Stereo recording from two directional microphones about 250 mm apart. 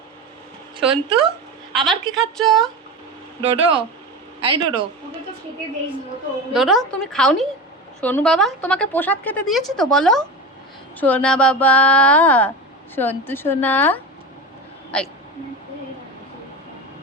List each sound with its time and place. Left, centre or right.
0.8 s speech: right
1.7 s speech: centre
3.4 s speech: right
6.5 s a woman's voice: centre